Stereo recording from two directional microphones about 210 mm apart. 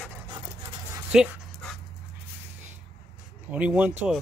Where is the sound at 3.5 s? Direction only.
5° right (ahead or behind).